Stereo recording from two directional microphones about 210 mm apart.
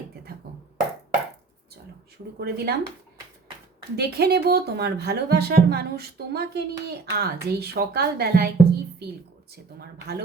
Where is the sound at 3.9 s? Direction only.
50° right (ahead or behind).